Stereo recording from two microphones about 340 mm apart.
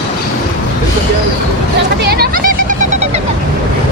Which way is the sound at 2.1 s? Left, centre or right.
Right.